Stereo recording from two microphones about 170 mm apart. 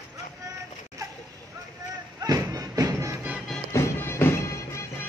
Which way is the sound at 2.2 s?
20° right (ahead or behind).